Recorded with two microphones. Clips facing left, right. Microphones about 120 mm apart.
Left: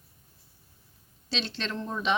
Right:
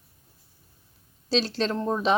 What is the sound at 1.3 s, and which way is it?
Speech, 40° right (ahead or behind).